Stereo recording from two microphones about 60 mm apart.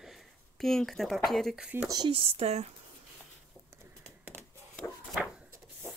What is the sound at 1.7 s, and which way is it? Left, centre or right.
Speech, right.